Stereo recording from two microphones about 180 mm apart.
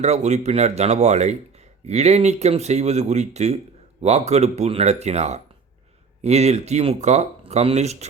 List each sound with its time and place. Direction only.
0.0 s speech: 40° right (ahead or behind)